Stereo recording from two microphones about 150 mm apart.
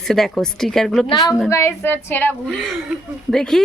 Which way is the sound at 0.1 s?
Centre (ahead or behind).